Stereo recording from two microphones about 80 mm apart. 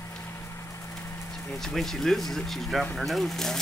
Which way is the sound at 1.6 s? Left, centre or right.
Centre.